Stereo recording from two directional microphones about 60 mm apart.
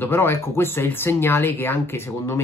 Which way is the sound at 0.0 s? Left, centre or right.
Left.